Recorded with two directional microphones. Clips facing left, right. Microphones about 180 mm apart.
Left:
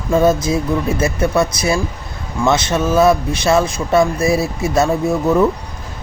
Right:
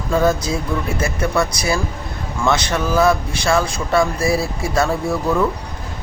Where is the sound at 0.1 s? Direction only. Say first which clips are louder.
Left 4 dB; 20° left (ahead or behind).